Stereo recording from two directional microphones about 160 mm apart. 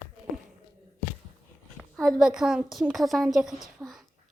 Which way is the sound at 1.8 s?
Centre (ahead or behind).